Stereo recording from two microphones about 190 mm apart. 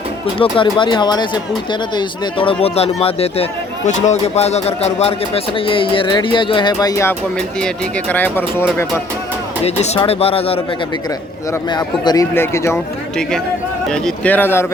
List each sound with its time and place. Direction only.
0.3 s a man's voice: 25° left (ahead or behind)
9.6 s speech: 35° left (ahead or behind)
11.7 s a man's voice: 20° left (ahead or behind)
13.9 s a man's voice: 5° left (ahead or behind)